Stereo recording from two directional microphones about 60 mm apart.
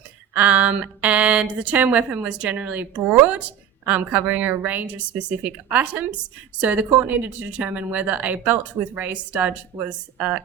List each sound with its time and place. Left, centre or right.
0.3 s speech: right